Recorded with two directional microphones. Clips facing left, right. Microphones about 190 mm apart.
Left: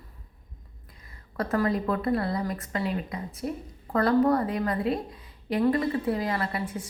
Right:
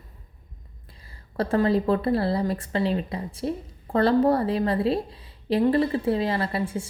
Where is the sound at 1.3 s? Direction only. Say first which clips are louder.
Right 4 dB; 30° right (ahead or behind).